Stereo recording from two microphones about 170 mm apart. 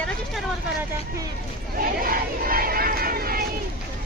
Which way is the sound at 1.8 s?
60° right (ahead or behind).